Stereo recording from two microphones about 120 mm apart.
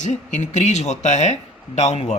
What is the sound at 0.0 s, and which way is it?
Speech, 85° left.